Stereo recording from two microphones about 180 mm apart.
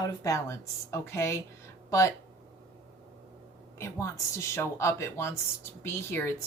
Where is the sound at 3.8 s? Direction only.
15° left (ahead or behind).